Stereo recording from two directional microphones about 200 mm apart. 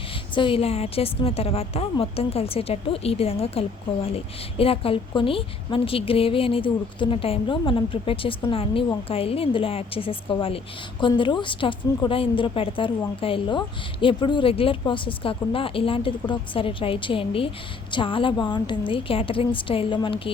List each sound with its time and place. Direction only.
0.3 s a woman's voice: 25° left (ahead or behind)